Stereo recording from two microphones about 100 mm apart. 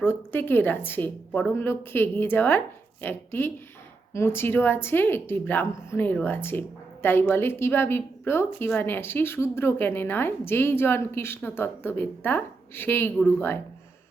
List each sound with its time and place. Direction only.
0.0 s a woman's voice: 20° left (ahead or behind)